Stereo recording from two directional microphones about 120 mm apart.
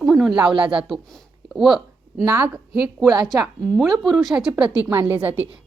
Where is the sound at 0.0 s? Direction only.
Centre (ahead or behind).